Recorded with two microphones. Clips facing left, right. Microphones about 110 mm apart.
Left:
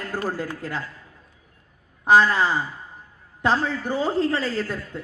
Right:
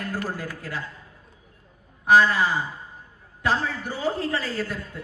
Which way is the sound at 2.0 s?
25° left (ahead or behind).